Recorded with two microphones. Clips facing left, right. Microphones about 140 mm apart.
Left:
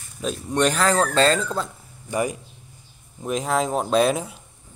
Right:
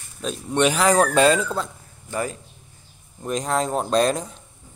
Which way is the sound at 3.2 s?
5° left (ahead or behind).